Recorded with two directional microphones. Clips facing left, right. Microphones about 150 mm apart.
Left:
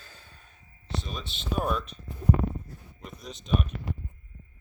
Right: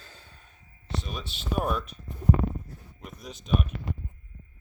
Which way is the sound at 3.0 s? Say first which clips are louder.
Even; 5° right (ahead or behind).